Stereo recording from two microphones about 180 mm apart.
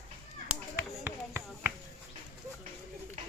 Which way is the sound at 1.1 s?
10° right (ahead or behind).